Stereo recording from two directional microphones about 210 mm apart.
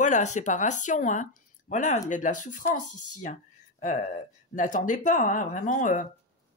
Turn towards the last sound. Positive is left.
turn(degrees=35)  # may be behind; listen again after turning